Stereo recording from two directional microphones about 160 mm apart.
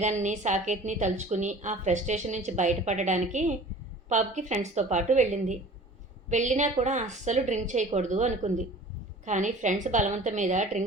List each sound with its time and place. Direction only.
0.0 s a woman's voice: 50° right (ahead or behind)